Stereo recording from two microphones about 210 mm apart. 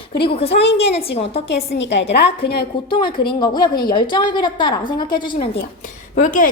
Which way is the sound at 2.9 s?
20° left (ahead or behind).